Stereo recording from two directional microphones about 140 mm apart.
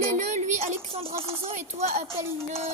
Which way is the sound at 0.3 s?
55° right (ahead or behind).